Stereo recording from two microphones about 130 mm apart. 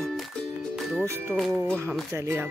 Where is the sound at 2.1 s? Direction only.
20° right (ahead or behind).